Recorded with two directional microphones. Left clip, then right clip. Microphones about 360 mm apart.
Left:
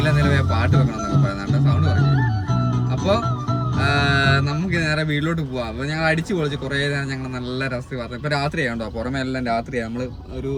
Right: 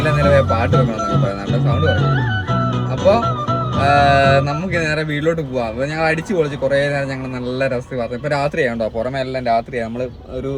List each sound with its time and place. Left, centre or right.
0.0 s music: centre
3.8 s speech: centre
8.3 s speech: centre